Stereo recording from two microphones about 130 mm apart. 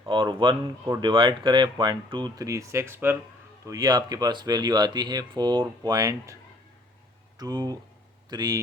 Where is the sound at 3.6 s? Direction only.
30° right (ahead or behind).